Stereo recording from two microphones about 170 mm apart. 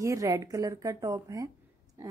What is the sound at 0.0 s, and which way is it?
A woman's voice, 20° right (ahead or behind).